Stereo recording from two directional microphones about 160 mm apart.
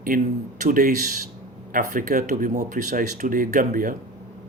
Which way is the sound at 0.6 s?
60° right (ahead or behind).